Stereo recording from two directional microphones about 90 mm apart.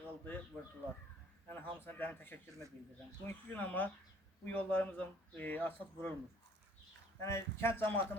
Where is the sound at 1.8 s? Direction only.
20° left (ahead or behind).